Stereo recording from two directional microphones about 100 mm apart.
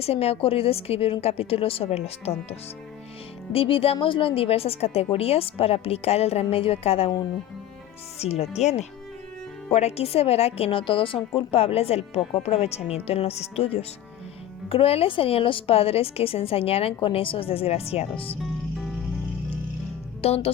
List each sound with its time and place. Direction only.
0.0 s a woman's voice: 90° left
3.5 s a woman's voice: 65° left (ahead or behind)
8.2 s a woman's voice: 90° left; by 11.2 s 60° left (ahead or behind)
11.3 s a woman's voice: 80° left
14.7 s a woman's voice: 75° left (ahead or behind)
20.2 s speech: 90° left